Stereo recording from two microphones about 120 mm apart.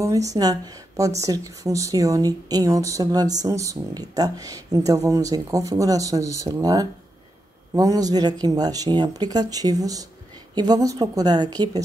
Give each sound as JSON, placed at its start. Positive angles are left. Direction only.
{"t": 0.0, "sound": "speech", "side_deg": -25}